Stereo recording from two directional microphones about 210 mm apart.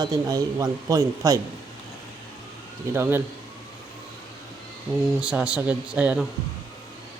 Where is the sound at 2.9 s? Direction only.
10° right (ahead or behind).